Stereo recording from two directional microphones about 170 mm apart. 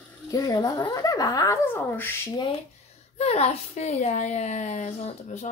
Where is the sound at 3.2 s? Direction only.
40° left (ahead or behind).